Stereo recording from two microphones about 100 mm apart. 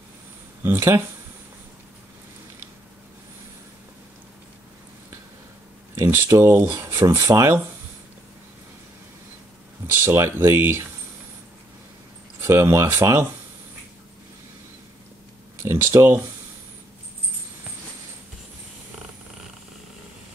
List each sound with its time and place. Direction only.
0.7 s speech: 25° right (ahead or behind)
5.9 s speech: 25° right (ahead or behind)
10.0 s speech: 25° right (ahead or behind)
12.4 s speech: 30° right (ahead or behind)
15.5 s speech: 25° right (ahead or behind)